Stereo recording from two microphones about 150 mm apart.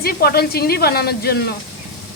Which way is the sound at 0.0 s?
90° left.